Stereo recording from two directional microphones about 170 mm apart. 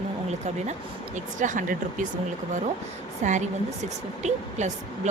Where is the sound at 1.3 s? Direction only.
50° right (ahead or behind).